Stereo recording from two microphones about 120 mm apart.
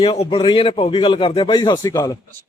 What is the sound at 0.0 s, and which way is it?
A man's voice, 45° left (ahead or behind).